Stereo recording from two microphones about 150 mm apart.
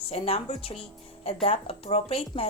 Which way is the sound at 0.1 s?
40° left (ahead or behind).